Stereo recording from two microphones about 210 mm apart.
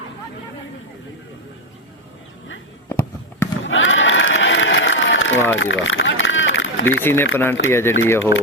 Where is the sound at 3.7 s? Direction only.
65° left (ahead or behind).